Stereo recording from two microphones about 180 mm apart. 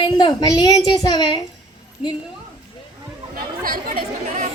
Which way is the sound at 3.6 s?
50° right (ahead or behind).